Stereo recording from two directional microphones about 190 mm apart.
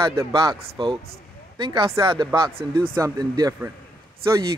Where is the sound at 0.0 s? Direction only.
15° right (ahead or behind).